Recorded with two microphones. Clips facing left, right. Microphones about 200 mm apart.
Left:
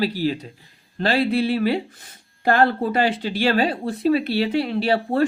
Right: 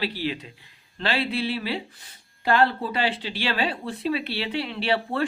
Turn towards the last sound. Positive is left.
turn(degrees=40)  # may be behind; listen again after turning